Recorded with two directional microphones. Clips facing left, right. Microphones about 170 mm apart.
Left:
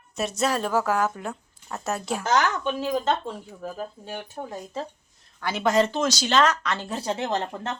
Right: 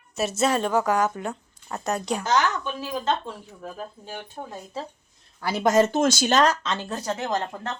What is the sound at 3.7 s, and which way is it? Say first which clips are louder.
Speech: left 2 dB; 10° left (ahead or behind).